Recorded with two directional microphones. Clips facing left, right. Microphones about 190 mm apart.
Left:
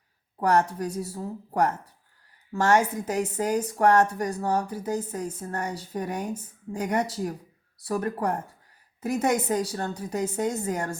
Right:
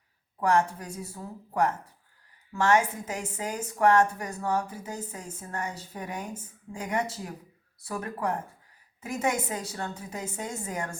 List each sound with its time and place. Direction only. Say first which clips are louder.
0.4 s a woman's voice: left 2 dB; 35° left (ahead or behind)